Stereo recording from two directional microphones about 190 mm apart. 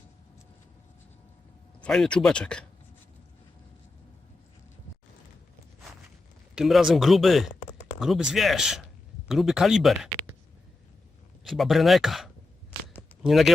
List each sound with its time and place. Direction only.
1.8 s speech: 5° left (ahead or behind)
6.6 s speech: centre (ahead or behind)
11.4 s speech: centre (ahead or behind)